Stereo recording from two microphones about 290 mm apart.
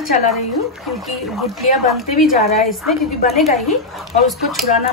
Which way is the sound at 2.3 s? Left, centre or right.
Left.